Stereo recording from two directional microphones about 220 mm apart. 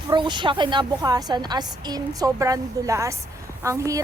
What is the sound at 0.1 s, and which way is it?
A woman's voice, 20° right (ahead or behind).